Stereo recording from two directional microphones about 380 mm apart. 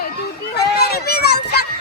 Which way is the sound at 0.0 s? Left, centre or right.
Left.